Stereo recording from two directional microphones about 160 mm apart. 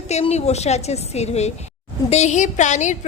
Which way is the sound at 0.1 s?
40° left (ahead or behind).